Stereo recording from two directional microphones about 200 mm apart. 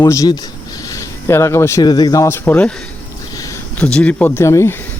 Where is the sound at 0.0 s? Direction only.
20° left (ahead or behind).